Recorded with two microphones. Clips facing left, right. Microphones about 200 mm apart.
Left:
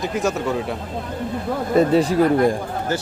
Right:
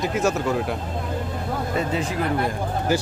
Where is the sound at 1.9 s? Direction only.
35° left (ahead or behind).